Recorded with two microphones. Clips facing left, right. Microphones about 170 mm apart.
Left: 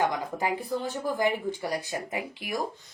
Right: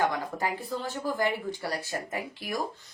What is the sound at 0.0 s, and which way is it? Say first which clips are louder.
A woman's voice: left 1 dB; 15° left (ahead or behind).